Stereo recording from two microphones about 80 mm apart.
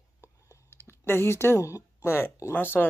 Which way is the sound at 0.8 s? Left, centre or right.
Left.